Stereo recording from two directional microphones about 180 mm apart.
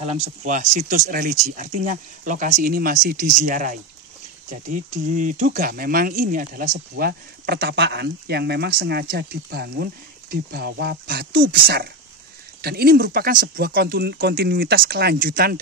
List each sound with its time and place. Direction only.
0.0 s speech: 40° right (ahead or behind)